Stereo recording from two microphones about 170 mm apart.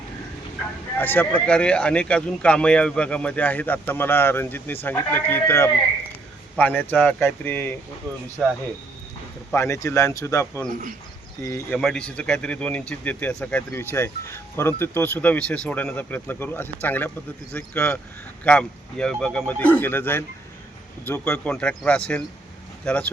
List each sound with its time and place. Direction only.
0.9 s speech: 10° left (ahead or behind)
9.5 s speech: 15° left (ahead or behind)
11.8 s speech: 5° left (ahead or behind)